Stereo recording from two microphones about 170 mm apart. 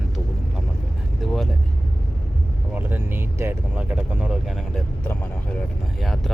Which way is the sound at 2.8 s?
10° right (ahead or behind).